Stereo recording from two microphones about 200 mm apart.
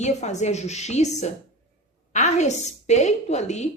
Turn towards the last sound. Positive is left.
turn(degrees=35)  # may be behind; listen again after turning